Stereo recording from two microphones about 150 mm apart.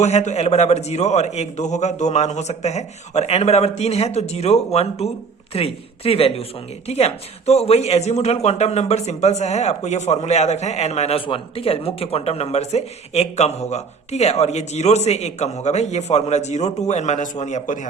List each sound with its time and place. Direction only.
0.0 s speech: 50° left (ahead or behind)